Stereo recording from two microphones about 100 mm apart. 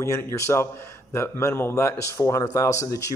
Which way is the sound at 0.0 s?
30° left (ahead or behind).